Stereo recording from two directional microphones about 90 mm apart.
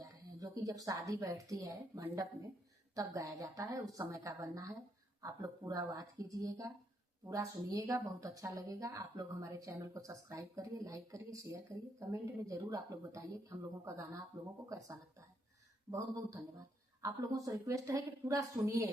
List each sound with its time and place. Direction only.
0.0 s speech: 40° right (ahead or behind)